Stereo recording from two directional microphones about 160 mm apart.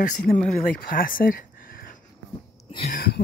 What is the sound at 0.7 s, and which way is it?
Speech, 65° left (ahead or behind).